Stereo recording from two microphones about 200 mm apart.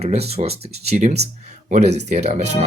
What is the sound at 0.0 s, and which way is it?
Speech, 30° right (ahead or behind).